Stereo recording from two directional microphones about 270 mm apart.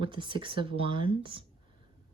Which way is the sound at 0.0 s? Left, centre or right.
Centre.